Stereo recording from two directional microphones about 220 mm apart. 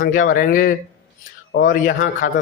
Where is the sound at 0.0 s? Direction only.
40° left (ahead or behind).